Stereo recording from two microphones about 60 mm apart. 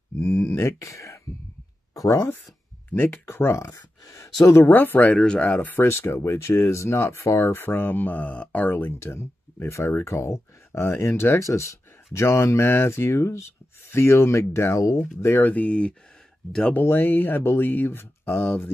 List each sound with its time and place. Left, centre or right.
0.2 s a sound: left
0.7 s speech: left
2.0 s speech: left
3.0 s speech: left
3.6 s speech: left
4.6 s speech: left
5.1 s speech: centre
5.6 s speech: left
5.9 s speech: left
8.7 s speech: left
11.3 s speech: left
15.0 s speech: left
15.4 s speech: left
16.9 s speech: left